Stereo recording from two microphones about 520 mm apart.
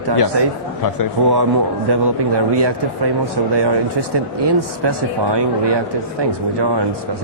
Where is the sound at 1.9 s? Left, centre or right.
Right.